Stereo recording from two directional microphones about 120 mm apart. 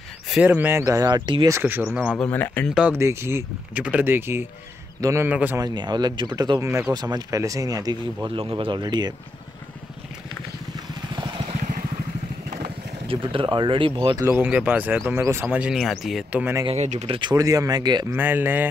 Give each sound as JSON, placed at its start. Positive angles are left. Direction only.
{"t": 0.3, "sound": "speech", "side_deg": -10}
{"t": 1.5, "sound": "speech", "side_deg": -15}
{"t": 2.1, "sound": "speech", "side_deg": 15}
{"t": 2.9, "sound": "speech", "side_deg": -20}
{"t": 5.6, "sound": "speech", "side_deg": -35}
{"t": 8.4, "sound": "speech", "side_deg": -45}
{"t": 12.6, "sound": "speech", "side_deg": -50}
{"t": 14.3, "sound": "speech", "side_deg": -10}
{"t": 15.7, "sound": "speech", "side_deg": 0}
{"t": 16.7, "sound": "speech", "side_deg": -70}
{"t": 17.1, "sound": "speech", "side_deg": -40}
{"t": 18.1, "sound": "speech", "side_deg": -15}